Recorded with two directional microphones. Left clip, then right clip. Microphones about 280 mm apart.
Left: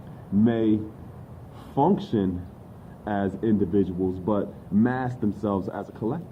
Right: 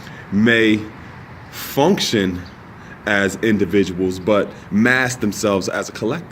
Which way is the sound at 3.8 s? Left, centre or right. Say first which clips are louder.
Right 7 dB; centre.